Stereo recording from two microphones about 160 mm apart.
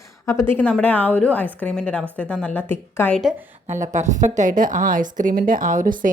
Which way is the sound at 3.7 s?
50° right (ahead or behind).